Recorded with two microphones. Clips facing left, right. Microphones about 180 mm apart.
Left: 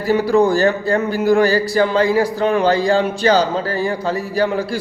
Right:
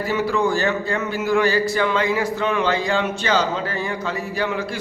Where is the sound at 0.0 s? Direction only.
35° left (ahead or behind).